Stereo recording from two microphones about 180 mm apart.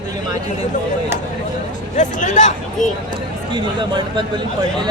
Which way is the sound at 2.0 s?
45° left (ahead or behind).